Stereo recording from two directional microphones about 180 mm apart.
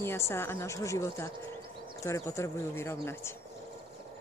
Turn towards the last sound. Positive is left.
turn(degrees=15)  # may be behind; listen again after turning